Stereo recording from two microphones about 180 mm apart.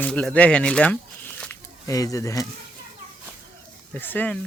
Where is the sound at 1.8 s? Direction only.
20° left (ahead or behind).